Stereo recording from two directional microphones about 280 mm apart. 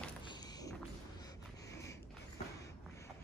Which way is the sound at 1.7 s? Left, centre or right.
Centre.